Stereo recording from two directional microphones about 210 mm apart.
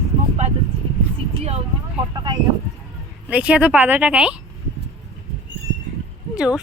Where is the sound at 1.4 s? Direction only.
30° right (ahead or behind).